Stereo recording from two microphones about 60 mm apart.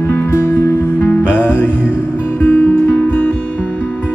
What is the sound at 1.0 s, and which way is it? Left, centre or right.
Music, left.